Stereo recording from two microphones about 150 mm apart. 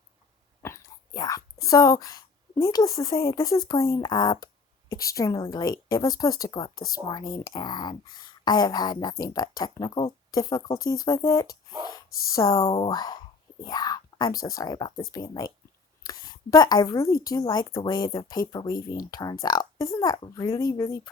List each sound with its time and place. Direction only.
0.6 s speech: 20° left (ahead or behind)
12.6 s speech: 40° left (ahead or behind)
12.9 s speech: 25° left (ahead or behind)